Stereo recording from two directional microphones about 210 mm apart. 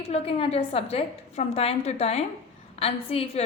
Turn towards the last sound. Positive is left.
turn(degrees=30)  # may be behind; listen again after turning